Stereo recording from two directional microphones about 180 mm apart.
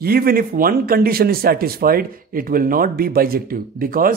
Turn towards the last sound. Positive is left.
turn(degrees=-50)  # may be behind; listen again after turning